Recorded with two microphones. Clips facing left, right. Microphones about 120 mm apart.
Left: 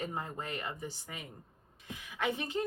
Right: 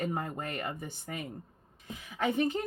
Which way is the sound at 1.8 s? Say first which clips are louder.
Right 3 dB; 40° right (ahead or behind).